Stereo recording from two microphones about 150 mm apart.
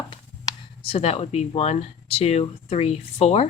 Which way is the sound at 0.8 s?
40° left (ahead or behind).